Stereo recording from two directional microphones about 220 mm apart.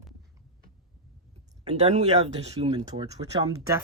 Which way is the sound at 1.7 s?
30° right (ahead or behind).